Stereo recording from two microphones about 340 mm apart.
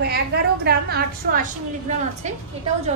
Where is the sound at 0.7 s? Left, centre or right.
Right.